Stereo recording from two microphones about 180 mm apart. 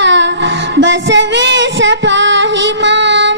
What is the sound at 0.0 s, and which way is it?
Child singing, 80° right.